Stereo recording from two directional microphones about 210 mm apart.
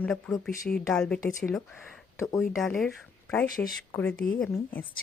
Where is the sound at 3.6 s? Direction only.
10° left (ahead or behind).